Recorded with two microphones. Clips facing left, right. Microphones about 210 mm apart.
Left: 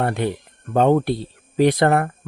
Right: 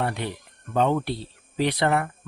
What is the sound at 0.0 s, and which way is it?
Speech, 50° left (ahead or behind).